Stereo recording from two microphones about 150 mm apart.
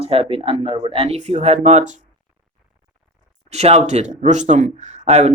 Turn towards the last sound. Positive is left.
turn(degrees=-45)  # may be behind; listen again after turning